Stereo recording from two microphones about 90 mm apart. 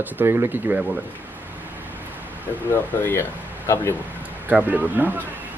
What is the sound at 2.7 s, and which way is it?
Speech, 25° left (ahead or behind).